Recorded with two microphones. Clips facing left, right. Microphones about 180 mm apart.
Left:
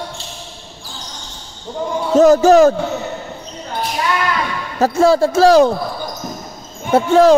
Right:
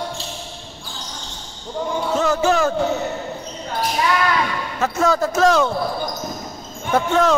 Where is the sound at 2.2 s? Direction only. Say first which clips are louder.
Left 11 dB; 40° left (ahead or behind).